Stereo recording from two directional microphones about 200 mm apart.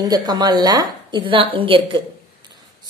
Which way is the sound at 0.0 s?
20° right (ahead or behind).